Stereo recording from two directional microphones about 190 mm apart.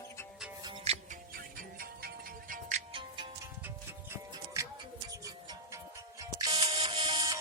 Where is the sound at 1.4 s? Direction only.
50° right (ahead or behind).